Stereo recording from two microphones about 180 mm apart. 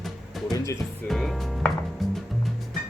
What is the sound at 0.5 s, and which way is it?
Music, 15° left (ahead or behind).